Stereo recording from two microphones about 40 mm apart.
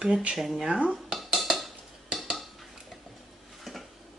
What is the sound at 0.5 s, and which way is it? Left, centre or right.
Dishes, right.